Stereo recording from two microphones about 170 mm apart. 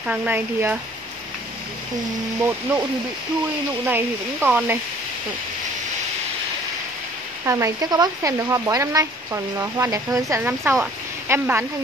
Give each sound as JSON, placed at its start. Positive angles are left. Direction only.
{"t": 0.0, "sound": "speech", "side_deg": -5}
{"t": 3.8, "sound": "speech", "side_deg": -10}
{"t": 7.4, "sound": "speech", "side_deg": -20}